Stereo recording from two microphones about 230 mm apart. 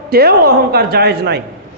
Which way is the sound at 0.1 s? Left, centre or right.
Right.